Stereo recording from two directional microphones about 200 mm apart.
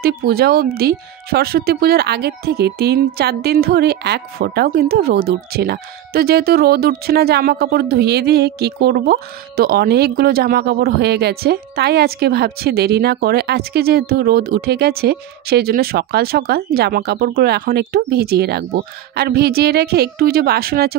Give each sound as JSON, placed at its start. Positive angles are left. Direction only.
{"t": 0.0, "sound": "speech", "side_deg": -50}